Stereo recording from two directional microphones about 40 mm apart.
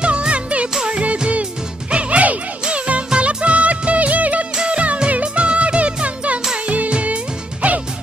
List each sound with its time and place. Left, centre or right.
0.0 s music: right